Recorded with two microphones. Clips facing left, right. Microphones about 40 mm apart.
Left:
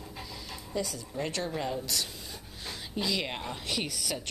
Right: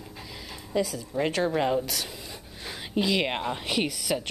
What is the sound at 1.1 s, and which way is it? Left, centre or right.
Speech, right.